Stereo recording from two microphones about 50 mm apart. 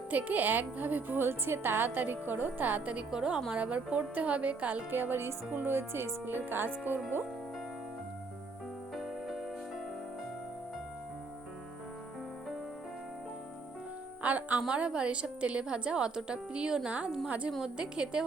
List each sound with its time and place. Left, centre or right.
0.1 s a woman's voice: right
3.1 s a woman's voice: centre
4.9 s speech: right
9.0 s music: centre
14.2 s music: right
14.7 s a woman's voice: centre
17.6 s a woman's voice: centre